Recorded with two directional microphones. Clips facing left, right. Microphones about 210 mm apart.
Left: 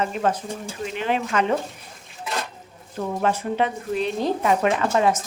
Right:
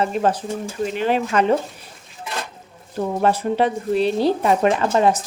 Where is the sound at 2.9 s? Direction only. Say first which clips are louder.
Right 4 dB; 35° right (ahead or behind).